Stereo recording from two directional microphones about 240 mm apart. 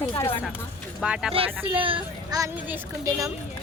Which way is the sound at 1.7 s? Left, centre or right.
Right.